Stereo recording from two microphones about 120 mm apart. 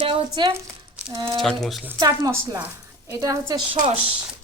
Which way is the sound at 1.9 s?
30° right (ahead or behind).